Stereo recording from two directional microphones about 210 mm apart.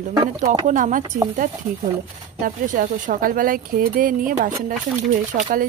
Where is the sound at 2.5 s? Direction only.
40° right (ahead or behind).